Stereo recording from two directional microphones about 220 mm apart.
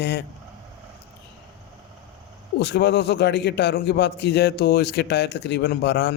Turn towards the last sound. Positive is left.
turn(degrees=50)  # may be behind; listen again after turning